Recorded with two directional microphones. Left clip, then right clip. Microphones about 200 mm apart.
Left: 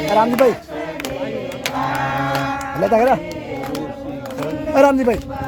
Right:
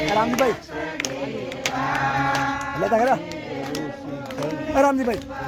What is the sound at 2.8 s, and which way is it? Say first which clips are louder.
Speech: left 5 dB; 30° left (ahead or behind).